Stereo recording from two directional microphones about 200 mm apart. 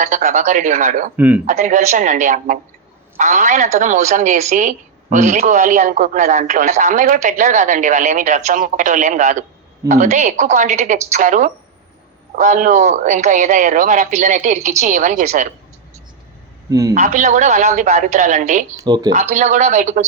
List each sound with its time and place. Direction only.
0.0 s a woman's voice: 35° right (ahead or behind)
1.1 s speech: 10° right (ahead or behind)
1.5 s a woman's voice: 40° right (ahead or behind)
16.6 s a man's voice: 15° right (ahead or behind)
16.9 s a woman's voice: 35° right (ahead or behind)
18.8 s speech: 20° right (ahead or behind)
19.1 s a woman's voice: 35° right (ahead or behind)